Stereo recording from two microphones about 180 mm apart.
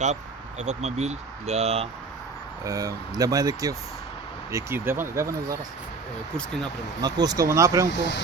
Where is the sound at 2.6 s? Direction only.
20° right (ahead or behind).